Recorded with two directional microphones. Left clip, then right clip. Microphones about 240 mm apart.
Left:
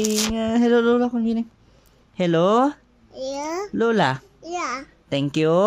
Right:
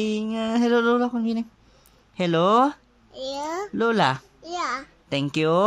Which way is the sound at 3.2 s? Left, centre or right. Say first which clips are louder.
Left 2 dB; centre.